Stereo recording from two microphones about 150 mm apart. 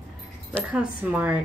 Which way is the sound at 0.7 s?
5° right (ahead or behind).